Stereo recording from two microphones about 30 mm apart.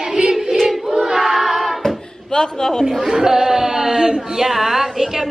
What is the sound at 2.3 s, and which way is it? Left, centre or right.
Speech, left.